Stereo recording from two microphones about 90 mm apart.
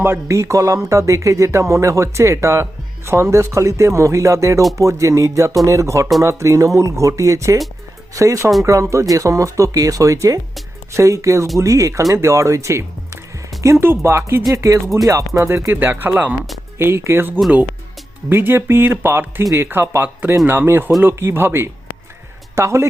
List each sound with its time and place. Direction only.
0.0 s speech: 30° right (ahead or behind)